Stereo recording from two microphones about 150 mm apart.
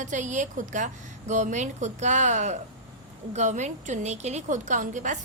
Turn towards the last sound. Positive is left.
turn(degrees=-55)  # may be behind; listen again after turning